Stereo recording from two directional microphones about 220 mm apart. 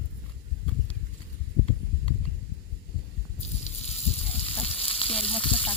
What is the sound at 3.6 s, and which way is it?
Sizzle, 30° left (ahead or behind).